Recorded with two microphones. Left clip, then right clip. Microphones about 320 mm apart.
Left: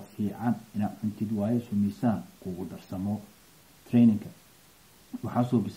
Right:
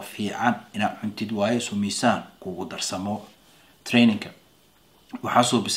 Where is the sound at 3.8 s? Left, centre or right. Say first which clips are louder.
Right 4 dB; centre.